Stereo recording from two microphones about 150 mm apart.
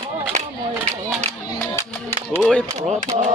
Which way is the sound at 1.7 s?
15° left (ahead or behind).